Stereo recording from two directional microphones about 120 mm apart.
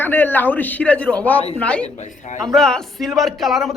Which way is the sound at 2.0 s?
80° left.